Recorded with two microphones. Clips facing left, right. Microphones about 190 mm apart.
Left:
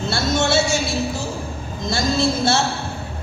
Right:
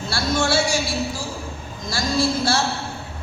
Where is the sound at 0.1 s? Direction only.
25° left (ahead or behind).